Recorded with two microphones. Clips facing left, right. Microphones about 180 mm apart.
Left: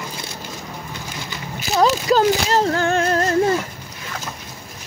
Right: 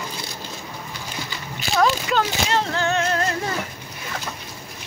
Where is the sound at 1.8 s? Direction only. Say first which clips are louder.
Left 6 dB; 40° left (ahead or behind).